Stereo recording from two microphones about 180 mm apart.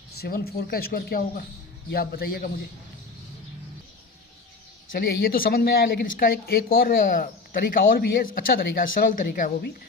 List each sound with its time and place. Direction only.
0.2 s speech: 60° left (ahead or behind)
4.9 s speech: 55° left (ahead or behind)